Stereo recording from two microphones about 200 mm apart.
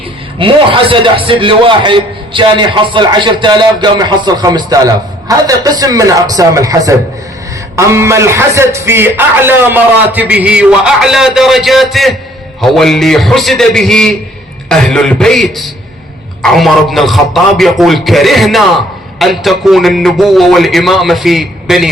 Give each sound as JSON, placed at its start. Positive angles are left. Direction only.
{"t": 0.3, "sound": "a man's voice", "side_deg": -25}